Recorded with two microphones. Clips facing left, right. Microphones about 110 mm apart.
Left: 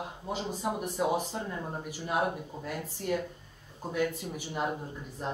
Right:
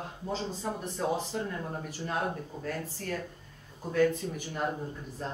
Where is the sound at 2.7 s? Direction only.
15° left (ahead or behind).